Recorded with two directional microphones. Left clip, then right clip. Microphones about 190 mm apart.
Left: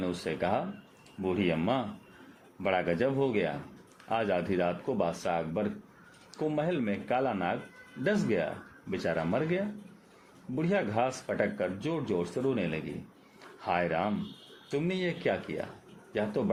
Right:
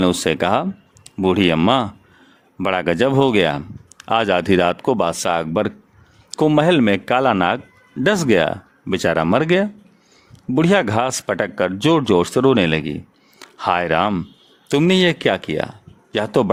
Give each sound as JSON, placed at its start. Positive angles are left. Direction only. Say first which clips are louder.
{"t": 0.0, "sound": "speech", "louder": "right 15 dB", "side_deg": -60}